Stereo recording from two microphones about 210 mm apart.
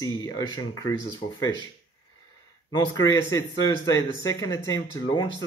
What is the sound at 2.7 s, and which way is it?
Speech, 20° left (ahead or behind).